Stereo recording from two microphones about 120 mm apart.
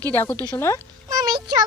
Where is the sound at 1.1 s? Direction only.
35° right (ahead or behind).